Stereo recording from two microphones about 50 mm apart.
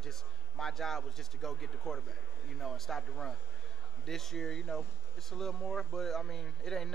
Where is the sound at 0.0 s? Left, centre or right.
Centre.